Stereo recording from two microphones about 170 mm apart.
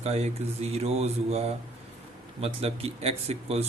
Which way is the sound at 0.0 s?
40° right (ahead or behind).